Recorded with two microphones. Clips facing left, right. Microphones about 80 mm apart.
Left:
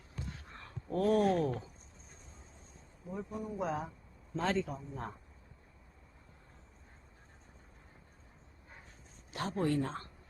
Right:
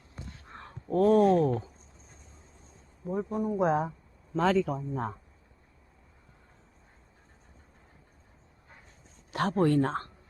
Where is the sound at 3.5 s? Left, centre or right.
Right.